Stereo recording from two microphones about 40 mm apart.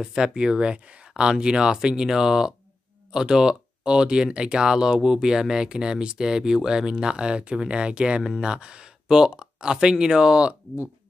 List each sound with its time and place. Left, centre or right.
0.0 s speech: centre